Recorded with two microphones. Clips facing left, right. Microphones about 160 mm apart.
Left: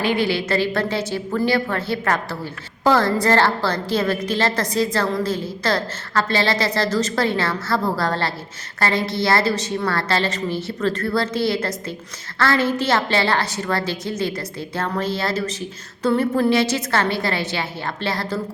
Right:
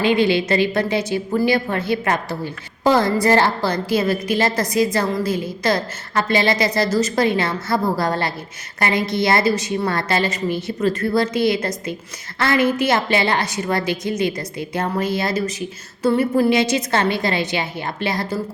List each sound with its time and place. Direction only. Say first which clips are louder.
0.0 s a woman's voice: right 4 dB; 20° right (ahead or behind)